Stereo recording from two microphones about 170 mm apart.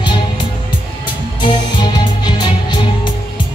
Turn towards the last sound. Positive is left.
turn(degrees=25)  # may be behind; listen again after turning